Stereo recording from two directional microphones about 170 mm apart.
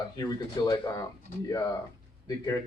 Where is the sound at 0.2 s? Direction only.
25° left (ahead or behind).